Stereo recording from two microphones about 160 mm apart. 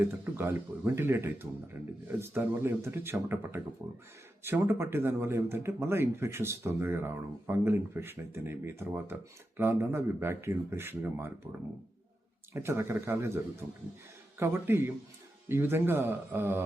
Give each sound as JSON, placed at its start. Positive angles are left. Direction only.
{"t": 0.0, "sound": "speech", "side_deg": -15}
{"t": 12.5, "sound": "speech", "side_deg": -15}